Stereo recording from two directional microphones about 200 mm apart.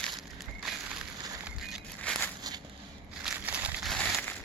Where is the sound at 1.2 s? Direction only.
15° right (ahead or behind).